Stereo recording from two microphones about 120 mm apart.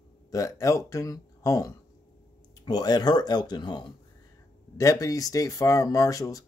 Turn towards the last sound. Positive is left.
turn(degrees=30)  # may be behind; listen again after turning